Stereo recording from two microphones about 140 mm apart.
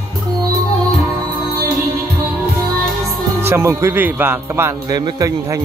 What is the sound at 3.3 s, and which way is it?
Speech, 15° right (ahead or behind).